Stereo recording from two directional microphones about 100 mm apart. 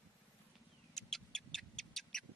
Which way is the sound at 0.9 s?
5° left (ahead or behind).